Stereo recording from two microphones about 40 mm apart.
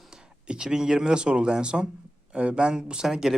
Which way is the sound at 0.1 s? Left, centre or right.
Right.